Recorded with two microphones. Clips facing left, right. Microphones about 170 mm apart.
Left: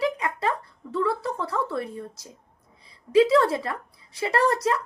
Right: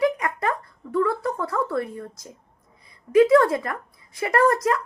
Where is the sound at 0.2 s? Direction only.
30° left (ahead or behind).